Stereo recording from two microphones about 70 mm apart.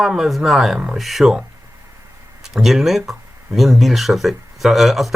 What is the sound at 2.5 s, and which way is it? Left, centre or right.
Speech, centre.